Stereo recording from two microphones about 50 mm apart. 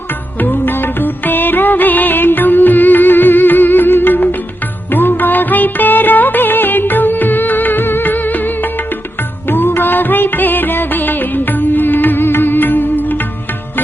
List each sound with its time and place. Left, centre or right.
0.3 s music: left